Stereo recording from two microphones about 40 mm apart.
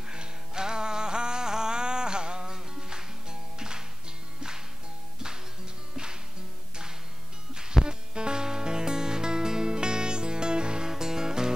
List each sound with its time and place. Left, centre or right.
0.1 s music: centre
7.5 s music: centre